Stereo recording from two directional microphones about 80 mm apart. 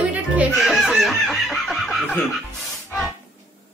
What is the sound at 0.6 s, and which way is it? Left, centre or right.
Chicken, centre.